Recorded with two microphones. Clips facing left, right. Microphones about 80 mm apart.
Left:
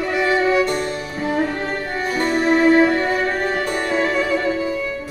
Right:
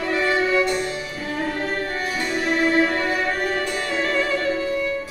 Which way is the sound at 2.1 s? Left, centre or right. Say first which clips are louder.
Left 7 dB; left.